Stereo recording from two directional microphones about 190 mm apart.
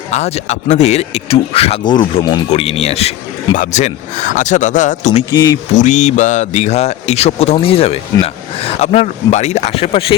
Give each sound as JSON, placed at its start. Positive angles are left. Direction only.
{"t": 0.1, "sound": "speech", "side_deg": 35}